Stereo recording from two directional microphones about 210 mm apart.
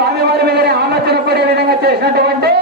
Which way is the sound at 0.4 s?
50° right (ahead or behind).